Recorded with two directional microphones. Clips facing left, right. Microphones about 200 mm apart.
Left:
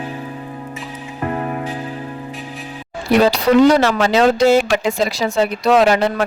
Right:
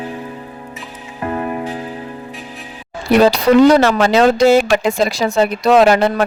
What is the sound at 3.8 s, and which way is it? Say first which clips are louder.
Speech: right 2 dB; 50° right (ahead or behind).